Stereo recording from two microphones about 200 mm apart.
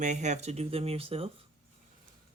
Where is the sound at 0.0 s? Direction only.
35° right (ahead or behind).